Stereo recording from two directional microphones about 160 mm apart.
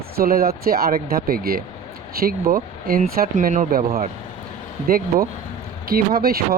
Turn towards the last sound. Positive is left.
turn(degrees=-70)  # may be behind; listen again after turning